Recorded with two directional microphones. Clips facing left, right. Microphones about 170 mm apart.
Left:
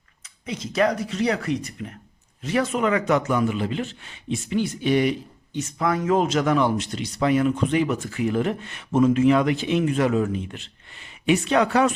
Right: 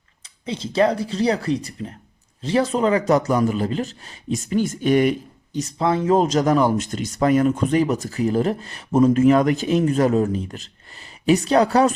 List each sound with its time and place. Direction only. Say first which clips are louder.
0.4 s speech: right 3 dB; 30° right (ahead or behind); by 5.1 s 45° right (ahead or behind)
5.5 s speech: right 3 dB; 30° right (ahead or behind)